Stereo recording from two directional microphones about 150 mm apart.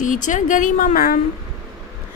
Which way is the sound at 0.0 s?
60° left (ahead or behind).